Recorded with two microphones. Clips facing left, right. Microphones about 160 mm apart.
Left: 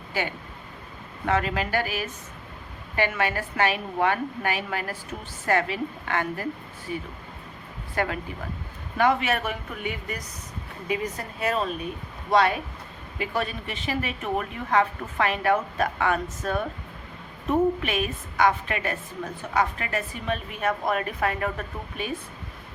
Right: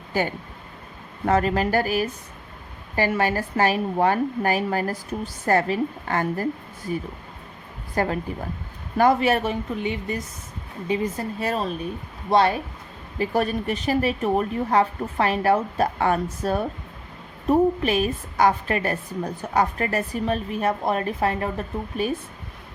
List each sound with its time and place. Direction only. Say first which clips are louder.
0.1 s a woman's voice: right 5 dB; 40° right (ahead or behind)
13.1 s a woman's voice: right 6 dB; 40° right (ahead or behind)